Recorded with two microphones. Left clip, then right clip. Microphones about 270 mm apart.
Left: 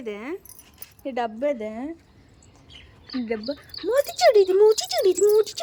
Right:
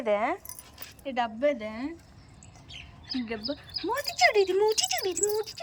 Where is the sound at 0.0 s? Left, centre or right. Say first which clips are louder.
Right 6 dB; centre.